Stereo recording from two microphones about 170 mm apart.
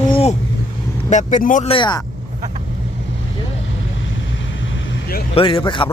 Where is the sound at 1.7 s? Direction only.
25° left (ahead or behind).